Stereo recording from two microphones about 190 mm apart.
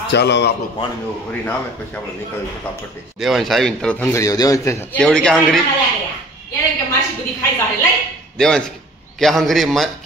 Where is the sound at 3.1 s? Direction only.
Centre (ahead or behind).